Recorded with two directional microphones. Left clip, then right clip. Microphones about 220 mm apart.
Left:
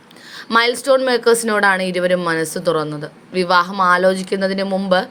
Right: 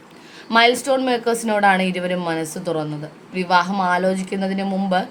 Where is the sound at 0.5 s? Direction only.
20° left (ahead or behind).